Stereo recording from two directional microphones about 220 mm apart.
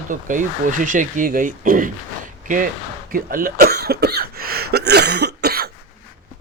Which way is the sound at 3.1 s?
40° right (ahead or behind).